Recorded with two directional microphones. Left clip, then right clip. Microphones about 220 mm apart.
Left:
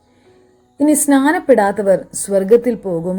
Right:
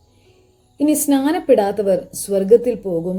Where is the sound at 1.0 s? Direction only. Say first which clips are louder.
Left 3 dB; 20° left (ahead or behind).